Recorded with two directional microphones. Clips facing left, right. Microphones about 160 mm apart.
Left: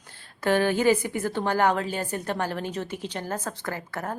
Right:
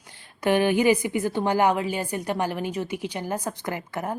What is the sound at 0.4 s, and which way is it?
A woman's voice, 15° right (ahead or behind).